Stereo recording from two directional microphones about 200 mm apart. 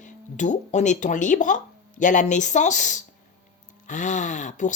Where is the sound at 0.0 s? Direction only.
40° left (ahead or behind).